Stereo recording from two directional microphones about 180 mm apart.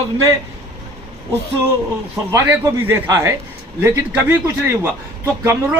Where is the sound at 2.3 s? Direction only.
10° right (ahead or behind).